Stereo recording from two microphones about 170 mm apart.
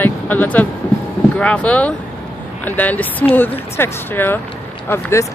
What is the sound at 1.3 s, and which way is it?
Speech, 10° left (ahead or behind).